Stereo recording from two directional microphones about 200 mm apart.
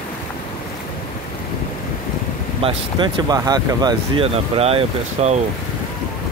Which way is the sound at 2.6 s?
20° right (ahead or behind).